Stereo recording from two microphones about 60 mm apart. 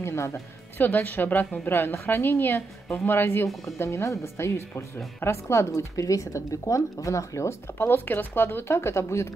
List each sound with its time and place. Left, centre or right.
0.0 s speech: left
0.7 s speech: left
3.6 s a woman's voice: left